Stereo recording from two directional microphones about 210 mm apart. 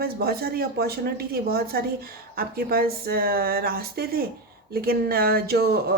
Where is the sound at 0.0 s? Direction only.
45° right (ahead or behind).